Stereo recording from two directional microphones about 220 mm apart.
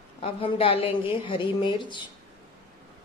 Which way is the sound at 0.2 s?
25° left (ahead or behind).